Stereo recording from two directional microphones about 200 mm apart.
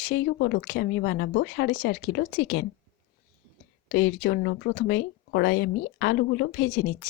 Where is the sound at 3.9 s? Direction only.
60° left (ahead or behind).